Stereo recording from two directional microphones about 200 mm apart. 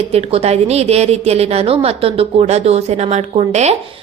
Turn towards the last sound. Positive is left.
turn(degrees=-35)  # may be behind; listen again after turning